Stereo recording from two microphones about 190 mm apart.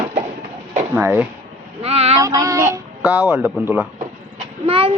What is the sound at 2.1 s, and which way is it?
A child's voice, 20° right (ahead or behind).